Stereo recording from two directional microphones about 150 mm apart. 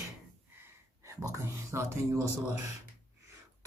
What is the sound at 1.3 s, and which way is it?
A man's voice, 20° right (ahead or behind).